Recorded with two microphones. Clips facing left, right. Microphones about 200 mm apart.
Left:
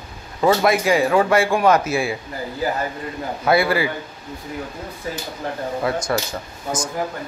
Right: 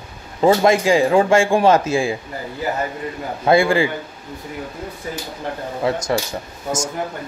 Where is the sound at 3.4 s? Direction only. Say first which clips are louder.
Right 3 dB; 25° right (ahead or behind).